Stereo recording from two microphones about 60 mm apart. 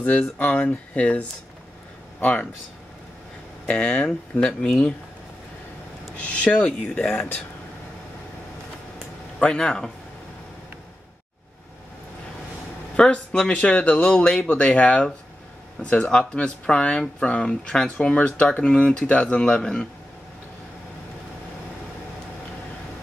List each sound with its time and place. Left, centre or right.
0.4 s speech: left
3.6 s speech: centre
6.1 s speech: left
7.1 s speech: left
9.4 s speech: centre
12.9 s speech: centre